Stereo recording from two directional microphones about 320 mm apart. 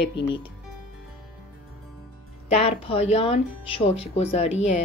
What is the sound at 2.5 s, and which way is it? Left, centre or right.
Speech, centre.